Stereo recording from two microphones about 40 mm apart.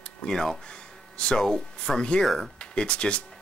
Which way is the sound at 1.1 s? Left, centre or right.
Left.